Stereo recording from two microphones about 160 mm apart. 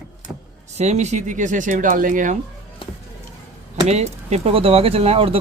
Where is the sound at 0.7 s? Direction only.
45° right (ahead or behind).